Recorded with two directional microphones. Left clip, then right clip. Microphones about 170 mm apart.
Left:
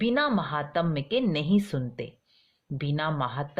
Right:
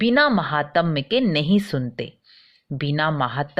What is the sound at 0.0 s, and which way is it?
Speech, 25° right (ahead or behind).